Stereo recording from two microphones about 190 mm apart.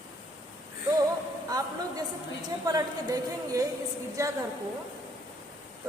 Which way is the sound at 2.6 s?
20° right (ahead or behind).